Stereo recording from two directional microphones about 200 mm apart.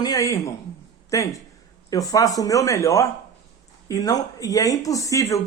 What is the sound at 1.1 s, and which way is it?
Speech, 15° left (ahead or behind).